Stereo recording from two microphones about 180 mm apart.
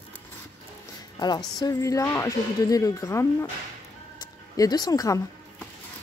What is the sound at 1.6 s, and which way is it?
Speech, 20° left (ahead or behind).